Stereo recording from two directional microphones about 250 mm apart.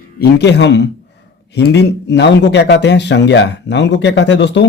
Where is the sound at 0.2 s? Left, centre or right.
Left.